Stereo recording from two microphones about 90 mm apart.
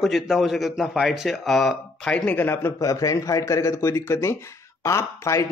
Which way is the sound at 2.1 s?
20° left (ahead or behind).